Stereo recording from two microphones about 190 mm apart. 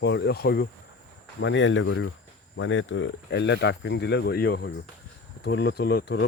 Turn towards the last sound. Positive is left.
turn(degrees=60)  # may be behind; listen again after turning